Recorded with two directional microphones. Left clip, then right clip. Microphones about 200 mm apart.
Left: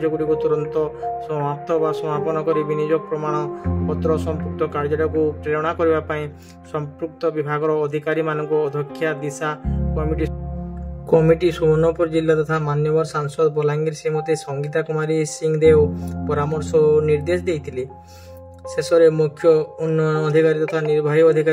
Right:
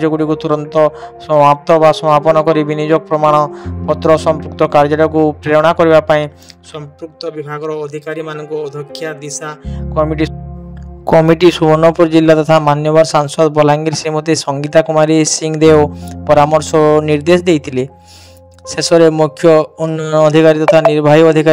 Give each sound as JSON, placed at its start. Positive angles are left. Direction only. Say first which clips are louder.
{"t": 0.0, "sound": "a man's voice", "louder": "right 5 dB", "side_deg": -40}
{"t": 7.0, "sound": "speech", "louder": "even", "side_deg": 0}
{"t": 9.9, "sound": "a man's voice", "louder": "right 11 dB", "side_deg": -40}
{"t": 11.3, "sound": "a man's voice", "louder": "right 8 dB", "side_deg": -40}